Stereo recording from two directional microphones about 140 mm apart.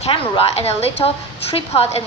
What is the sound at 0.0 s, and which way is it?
A woman's voice, 45° left (ahead or behind).